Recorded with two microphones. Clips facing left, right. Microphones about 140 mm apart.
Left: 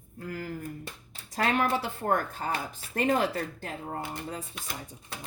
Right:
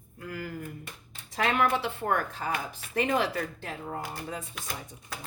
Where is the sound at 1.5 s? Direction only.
40° left (ahead or behind).